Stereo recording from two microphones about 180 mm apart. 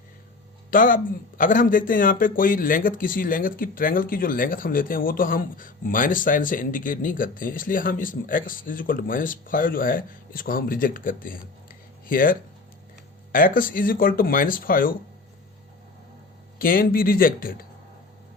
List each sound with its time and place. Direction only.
0.7 s a man's voice: 50° left (ahead or behind)
16.6 s a man's voice: 55° left (ahead or behind)